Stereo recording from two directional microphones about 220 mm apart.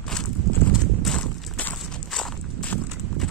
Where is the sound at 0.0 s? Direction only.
5° left (ahead or behind).